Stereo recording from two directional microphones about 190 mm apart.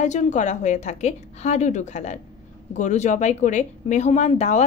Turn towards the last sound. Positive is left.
turn(degrees=35)  # may be behind; listen again after turning